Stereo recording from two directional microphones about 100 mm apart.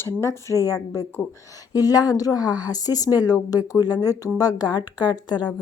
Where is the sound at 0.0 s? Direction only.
30° left (ahead or behind).